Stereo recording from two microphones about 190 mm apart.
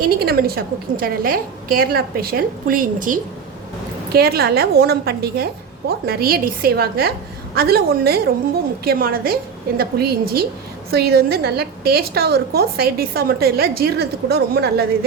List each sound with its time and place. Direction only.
0.2 s a woman's voice: 55° right (ahead or behind)